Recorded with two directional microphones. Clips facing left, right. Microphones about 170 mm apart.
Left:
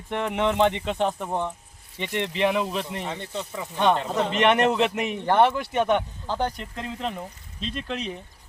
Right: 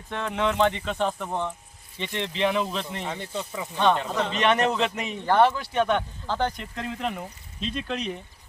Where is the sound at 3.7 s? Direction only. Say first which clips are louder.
Left 1 dB; 15° left (ahead or behind).